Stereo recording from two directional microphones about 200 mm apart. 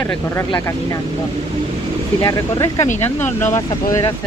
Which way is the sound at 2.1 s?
15° left (ahead or behind).